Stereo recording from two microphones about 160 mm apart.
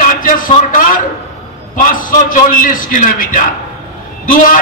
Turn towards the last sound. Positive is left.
turn(degrees=55)  # may be behind; listen again after turning